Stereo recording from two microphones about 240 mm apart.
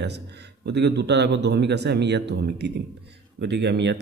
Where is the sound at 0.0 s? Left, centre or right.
Right.